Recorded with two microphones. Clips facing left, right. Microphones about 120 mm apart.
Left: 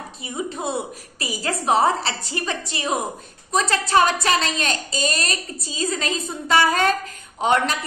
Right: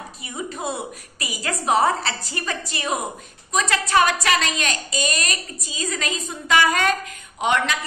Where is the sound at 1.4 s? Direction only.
30° left (ahead or behind).